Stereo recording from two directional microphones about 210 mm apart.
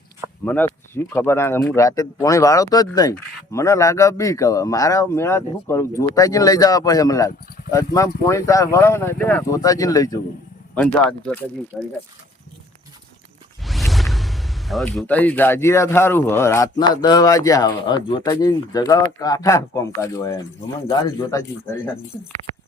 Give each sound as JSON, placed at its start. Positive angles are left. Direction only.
{"t": 0.4, "sound": "speech", "side_deg": 10}
{"t": 10.8, "sound": "speech", "side_deg": 5}
{"t": 13.7, "sound": "speech", "side_deg": 0}